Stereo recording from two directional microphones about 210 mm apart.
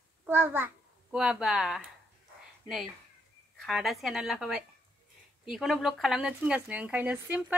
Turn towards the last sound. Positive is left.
turn(degrees=-5)  # may be behind; listen again after turning